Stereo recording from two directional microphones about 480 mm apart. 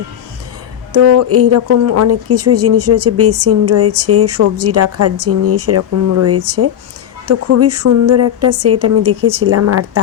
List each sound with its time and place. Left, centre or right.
0.9 s speech: right